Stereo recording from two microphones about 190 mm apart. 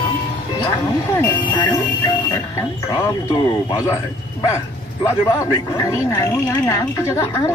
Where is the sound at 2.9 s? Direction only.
20° left (ahead or behind).